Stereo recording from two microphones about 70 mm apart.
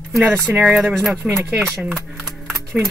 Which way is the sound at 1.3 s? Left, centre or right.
Right.